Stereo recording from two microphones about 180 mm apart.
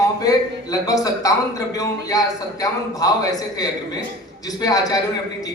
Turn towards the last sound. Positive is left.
turn(degrees=20)  # may be behind; listen again after turning